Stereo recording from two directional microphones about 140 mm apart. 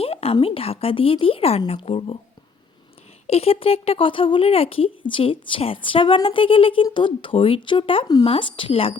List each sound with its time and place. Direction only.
0.0 s speech: 45° left (ahead or behind)
3.2 s speech: 45° left (ahead or behind)